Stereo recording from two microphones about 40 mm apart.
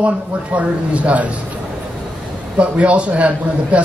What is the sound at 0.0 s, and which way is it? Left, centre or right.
A man's voice, right.